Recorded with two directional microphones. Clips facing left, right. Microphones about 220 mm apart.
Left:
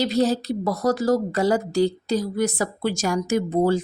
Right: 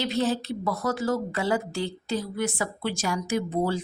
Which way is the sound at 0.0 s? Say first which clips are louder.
Left 5 dB; 35° left (ahead or behind).